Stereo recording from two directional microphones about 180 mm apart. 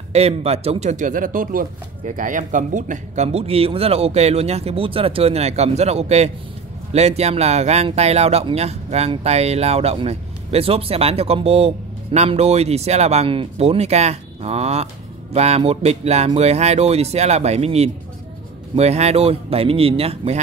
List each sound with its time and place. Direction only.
0.1 s speech: 35° right (ahead or behind)